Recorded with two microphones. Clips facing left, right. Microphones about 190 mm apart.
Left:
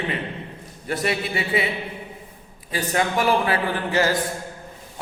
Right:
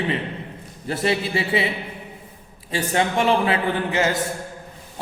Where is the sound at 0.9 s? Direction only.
25° right (ahead or behind).